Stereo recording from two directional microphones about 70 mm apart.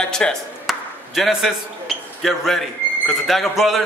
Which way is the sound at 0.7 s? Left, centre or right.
Centre.